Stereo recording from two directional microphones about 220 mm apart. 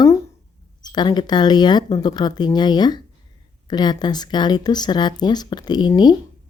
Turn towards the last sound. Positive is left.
turn(degrees=20)  # may be behind; listen again after turning